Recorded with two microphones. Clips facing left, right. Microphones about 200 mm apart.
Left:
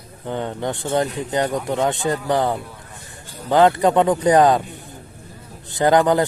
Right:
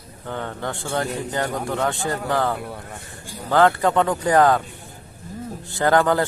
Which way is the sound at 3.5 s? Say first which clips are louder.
Left 3 dB; 20° left (ahead or behind).